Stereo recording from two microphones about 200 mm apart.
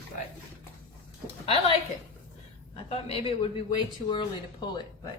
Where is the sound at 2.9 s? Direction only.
30° left (ahead or behind).